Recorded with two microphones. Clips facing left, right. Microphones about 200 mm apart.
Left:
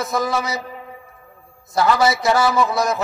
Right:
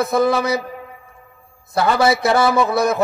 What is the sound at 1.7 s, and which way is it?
A man's voice, 60° right (ahead or behind).